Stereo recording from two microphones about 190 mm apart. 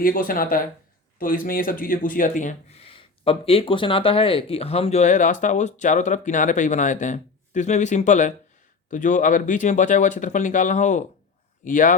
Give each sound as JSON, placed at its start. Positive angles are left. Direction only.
{"t": 0.0, "sound": "speech", "side_deg": 50}